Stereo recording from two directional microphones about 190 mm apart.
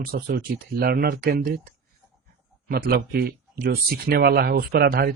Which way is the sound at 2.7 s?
50° right (ahead or behind).